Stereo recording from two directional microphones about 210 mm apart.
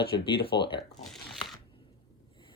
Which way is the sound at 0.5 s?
20° left (ahead or behind).